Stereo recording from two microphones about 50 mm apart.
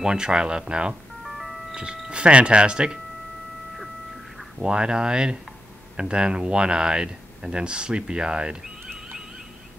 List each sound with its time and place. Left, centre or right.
0.0 s speech: centre
1.2 s music: centre
2.0 s speech: right
4.6 s speech: centre